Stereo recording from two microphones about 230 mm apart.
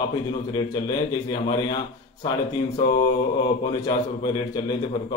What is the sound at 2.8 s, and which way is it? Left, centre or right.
Speech, centre.